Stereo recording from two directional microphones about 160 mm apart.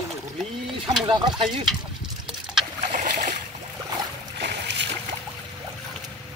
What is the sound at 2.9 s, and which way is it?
Boat, 50° right (ahead or behind).